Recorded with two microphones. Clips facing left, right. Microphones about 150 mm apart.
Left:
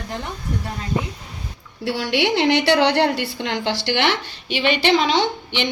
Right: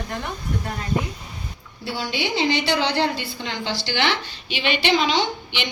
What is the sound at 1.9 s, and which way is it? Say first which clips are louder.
A woman's voice: left 6 dB; 75° left (ahead or behind).